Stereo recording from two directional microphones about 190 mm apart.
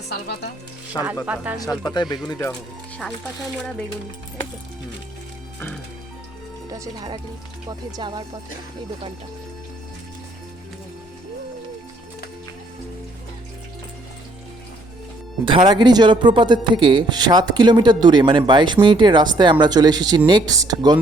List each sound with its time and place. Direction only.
0.9 s speech: 20° left (ahead or behind)
6.7 s a man's voice: 20° right (ahead or behind)
15.4 s a man's voice: 25° right (ahead or behind)